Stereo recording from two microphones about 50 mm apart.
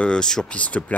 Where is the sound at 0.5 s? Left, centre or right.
Left.